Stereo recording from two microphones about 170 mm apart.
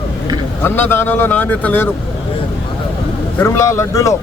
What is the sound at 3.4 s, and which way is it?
Speech, 15° left (ahead or behind).